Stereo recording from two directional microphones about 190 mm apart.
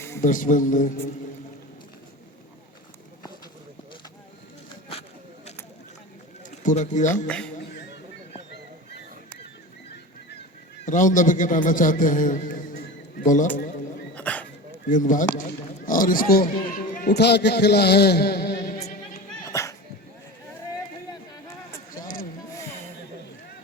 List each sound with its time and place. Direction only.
0.2 s a man's voice: 45° left (ahead or behind)
6.6 s speech: 40° left (ahead or behind)
7.3 s speech: 5° left (ahead or behind)
10.8 s a man's voice: 40° left (ahead or behind)
14.2 s dog: 10° left (ahead or behind)
14.8 s a man's voice: 45° left (ahead or behind)
19.5 s a sound: 15° left (ahead or behind)
22.0 s a sound: 45° left (ahead or behind)